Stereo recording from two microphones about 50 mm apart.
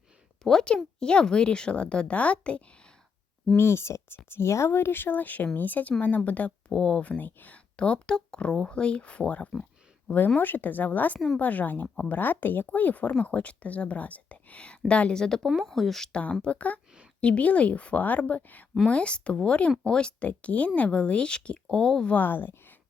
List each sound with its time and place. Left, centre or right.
0.4 s speech: centre
3.5 s speech: left
6.7 s speech: centre
7.2 s speech: left
7.8 s speech: centre
10.2 s speech: left
15.4 s speech: centre
16.4 s speech: left
22.1 s speech: left